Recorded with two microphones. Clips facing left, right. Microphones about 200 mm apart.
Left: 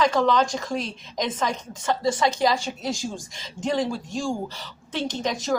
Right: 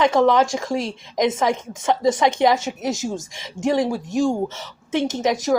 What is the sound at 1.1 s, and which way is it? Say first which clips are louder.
Speech: right 7 dB; 20° right (ahead or behind).